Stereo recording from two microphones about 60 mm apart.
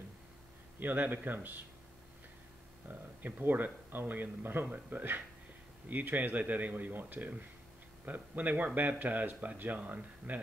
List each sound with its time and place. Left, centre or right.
0.7 s speech: right
2.9 s speech: right